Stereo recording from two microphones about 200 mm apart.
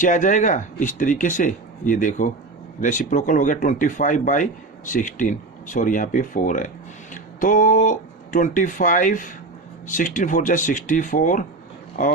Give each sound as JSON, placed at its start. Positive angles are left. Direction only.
{"t": 0.0, "sound": "speech", "side_deg": 40}